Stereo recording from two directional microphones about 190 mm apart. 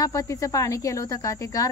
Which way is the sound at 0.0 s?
15° left (ahead or behind).